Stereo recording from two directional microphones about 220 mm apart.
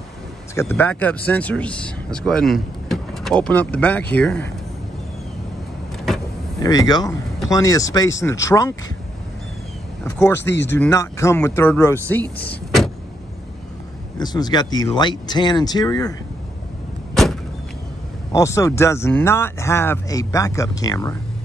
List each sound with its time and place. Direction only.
0.6 s speech: 10° left (ahead or behind)
6.6 s speech: 15° left (ahead or behind)
10.0 s speech: 10° left (ahead or behind)
14.1 s speech: 20° left (ahead or behind)
17.1 s vehicle: centre (ahead or behind)
18.3 s speech: 15° left (ahead or behind)